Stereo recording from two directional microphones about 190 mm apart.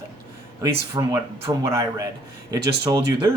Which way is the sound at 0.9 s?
15° right (ahead or behind).